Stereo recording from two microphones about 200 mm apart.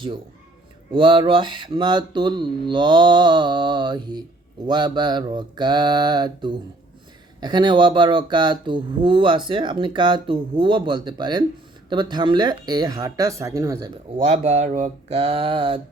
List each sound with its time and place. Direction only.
0.9 s speech: 25° right (ahead or behind)
14.3 s speech: 35° right (ahead or behind)